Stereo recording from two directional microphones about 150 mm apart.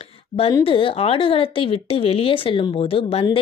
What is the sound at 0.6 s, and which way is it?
Speech, 35° left (ahead or behind).